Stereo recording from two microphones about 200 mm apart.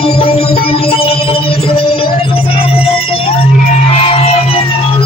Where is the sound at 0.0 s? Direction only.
30° left (ahead or behind).